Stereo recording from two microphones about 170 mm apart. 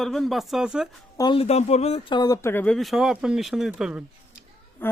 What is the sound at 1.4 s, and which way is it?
Speech, 40° left (ahead or behind).